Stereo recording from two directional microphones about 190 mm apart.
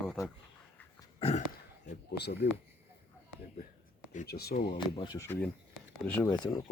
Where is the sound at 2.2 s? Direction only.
60° left (ahead or behind).